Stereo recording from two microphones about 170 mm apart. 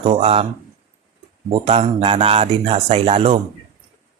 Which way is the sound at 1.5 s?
35° right (ahead or behind).